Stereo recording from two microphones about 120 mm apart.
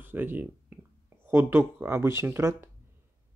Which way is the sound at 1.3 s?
15° right (ahead or behind).